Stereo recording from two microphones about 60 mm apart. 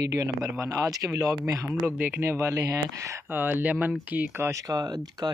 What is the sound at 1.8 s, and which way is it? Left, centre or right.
Speech, right.